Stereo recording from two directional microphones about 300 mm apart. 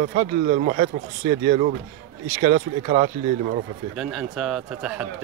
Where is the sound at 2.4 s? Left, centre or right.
Right.